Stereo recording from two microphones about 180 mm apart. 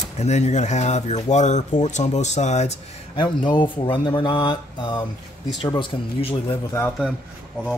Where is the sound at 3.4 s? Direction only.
25° left (ahead or behind).